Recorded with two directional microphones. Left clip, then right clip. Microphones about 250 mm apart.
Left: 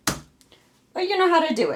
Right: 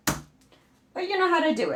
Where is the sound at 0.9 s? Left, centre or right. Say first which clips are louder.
Left 4 dB; left.